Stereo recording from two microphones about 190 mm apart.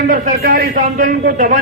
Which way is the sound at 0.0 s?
50° right (ahead or behind).